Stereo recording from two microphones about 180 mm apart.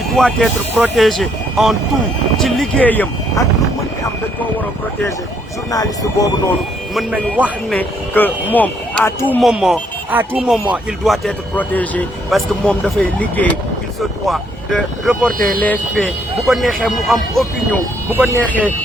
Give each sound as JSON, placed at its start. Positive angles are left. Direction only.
{"t": 0.1, "sound": "speech", "side_deg": 0}
{"t": 5.7, "sound": "speech", "side_deg": 20}
{"t": 6.9, "sound": "speech", "side_deg": -10}
{"t": 7.7, "sound": "speech", "side_deg": 10}
{"t": 9.4, "sound": "speech", "side_deg": 0}
{"t": 15.3, "sound": "speech", "side_deg": -50}
{"t": 15.6, "sound": "speech", "side_deg": 5}